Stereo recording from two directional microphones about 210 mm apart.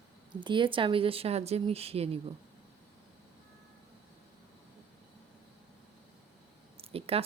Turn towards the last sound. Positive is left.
turn(degrees=-30)  # may be behind; listen again after turning